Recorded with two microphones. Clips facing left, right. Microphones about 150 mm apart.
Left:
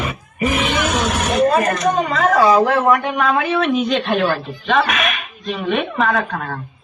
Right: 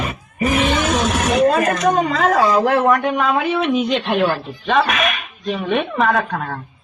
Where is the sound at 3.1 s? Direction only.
20° right (ahead or behind).